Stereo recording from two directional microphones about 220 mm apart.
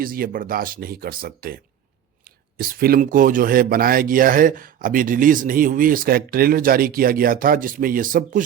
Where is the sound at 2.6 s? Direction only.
40° right (ahead or behind).